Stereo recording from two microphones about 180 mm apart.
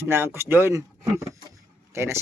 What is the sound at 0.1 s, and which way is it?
Speech, 15° right (ahead or behind).